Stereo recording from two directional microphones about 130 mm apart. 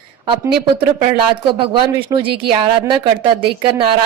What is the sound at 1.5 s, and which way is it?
Speech, 40° right (ahead or behind).